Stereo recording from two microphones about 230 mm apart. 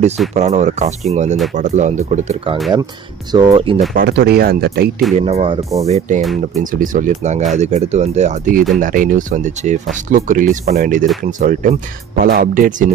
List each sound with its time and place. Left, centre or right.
0.3 s speech: right
3.3 s speech: centre
3.9 s speech: right
5.2 s speech: right